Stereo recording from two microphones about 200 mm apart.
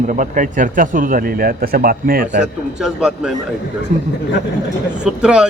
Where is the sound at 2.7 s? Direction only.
5° right (ahead or behind).